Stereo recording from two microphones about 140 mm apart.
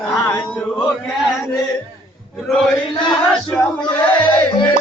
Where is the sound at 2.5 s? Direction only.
Centre (ahead or behind).